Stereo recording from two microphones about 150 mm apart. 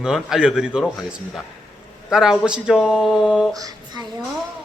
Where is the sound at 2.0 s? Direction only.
5° right (ahead or behind).